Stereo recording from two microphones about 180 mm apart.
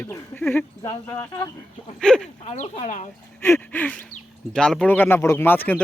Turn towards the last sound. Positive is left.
turn(degrees=10)  # may be behind; listen again after turning